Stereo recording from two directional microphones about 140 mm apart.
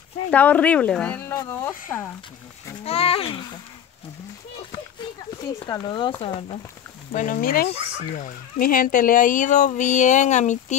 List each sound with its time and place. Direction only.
0.3 s speech: 10° left (ahead or behind)
2.8 s speech: 45° left (ahead or behind)
5.7 s speech: 30° left (ahead or behind)
7.1 s speech: 75° left (ahead or behind); by 10.8 s 55° left (ahead or behind)